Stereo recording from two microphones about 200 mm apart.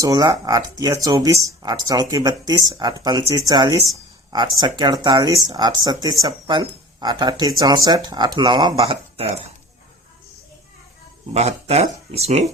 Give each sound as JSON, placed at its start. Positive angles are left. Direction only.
{"t": 0.0, "sound": "speech", "side_deg": -15}
{"t": 9.1, "sound": "dishes", "side_deg": -30}
{"t": 11.3, "sound": "speech", "side_deg": -30}